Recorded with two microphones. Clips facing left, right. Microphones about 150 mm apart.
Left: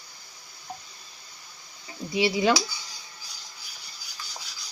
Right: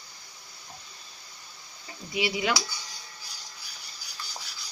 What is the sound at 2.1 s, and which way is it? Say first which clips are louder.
Speech: left 5 dB; 30° left (ahead or behind).